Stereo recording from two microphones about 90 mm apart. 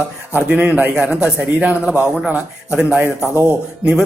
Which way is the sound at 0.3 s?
15° right (ahead or behind).